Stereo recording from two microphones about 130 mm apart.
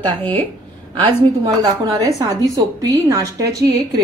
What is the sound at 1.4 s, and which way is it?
A woman's voice, 25° right (ahead or behind).